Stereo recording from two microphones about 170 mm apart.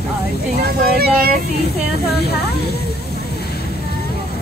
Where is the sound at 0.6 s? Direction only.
60° right (ahead or behind).